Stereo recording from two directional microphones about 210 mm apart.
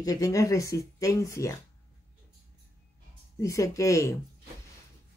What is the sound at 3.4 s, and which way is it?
Speech, 15° left (ahead or behind).